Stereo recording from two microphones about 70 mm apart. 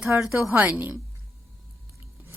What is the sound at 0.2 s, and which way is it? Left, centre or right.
Speech, centre.